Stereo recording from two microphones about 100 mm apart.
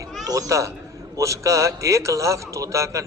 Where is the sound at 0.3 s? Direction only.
35° right (ahead or behind).